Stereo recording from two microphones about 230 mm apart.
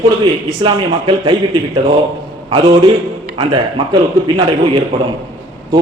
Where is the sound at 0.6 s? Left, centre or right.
Right.